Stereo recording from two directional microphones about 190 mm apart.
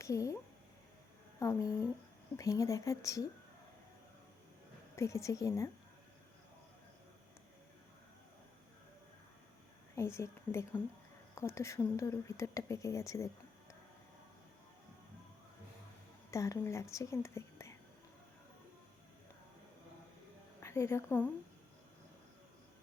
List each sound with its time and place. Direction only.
0.0 s speech: 15° left (ahead or behind)
1.4 s speech: 15° left (ahead or behind)
4.9 s speech: 15° left (ahead or behind)
9.9 s a woman's voice: 15° left (ahead or behind)
16.3 s speech: 15° left (ahead or behind)
20.6 s a woman's voice: 15° left (ahead or behind)